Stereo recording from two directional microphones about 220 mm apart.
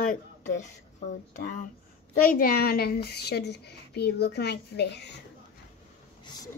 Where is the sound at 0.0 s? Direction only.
35° left (ahead or behind).